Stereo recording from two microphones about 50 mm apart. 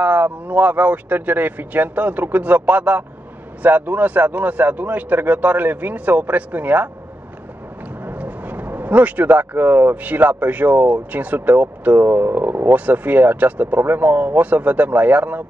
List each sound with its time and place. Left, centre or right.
0.0 s speech: right
8.0 s speech: right